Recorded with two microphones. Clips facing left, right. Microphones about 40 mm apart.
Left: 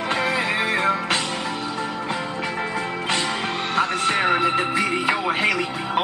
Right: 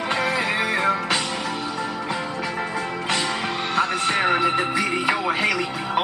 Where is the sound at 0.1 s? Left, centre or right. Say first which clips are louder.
Even; centre.